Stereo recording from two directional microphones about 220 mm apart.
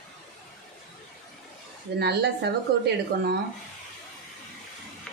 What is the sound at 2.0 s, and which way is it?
A woman's voice, 50° right (ahead or behind).